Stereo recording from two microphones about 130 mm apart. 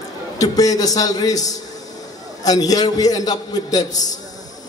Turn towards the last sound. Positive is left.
turn(degrees=30)  # may be behind; listen again after turning